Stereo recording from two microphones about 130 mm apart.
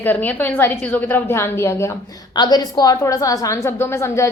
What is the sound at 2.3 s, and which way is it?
A woman's voice, 30° left (ahead or behind).